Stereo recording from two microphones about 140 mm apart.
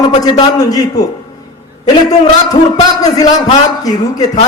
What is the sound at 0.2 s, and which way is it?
Speech, 25° left (ahead or behind).